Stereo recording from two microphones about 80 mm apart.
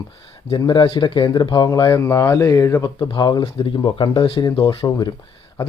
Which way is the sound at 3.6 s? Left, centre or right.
Left.